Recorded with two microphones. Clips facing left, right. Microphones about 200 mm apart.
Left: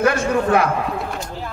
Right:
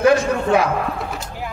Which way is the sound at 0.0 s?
55° left (ahead or behind).